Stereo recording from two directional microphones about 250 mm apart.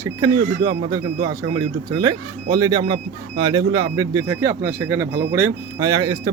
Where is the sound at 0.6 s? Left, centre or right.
Right.